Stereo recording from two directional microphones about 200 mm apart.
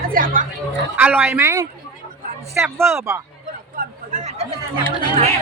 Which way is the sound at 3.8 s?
35° right (ahead or behind).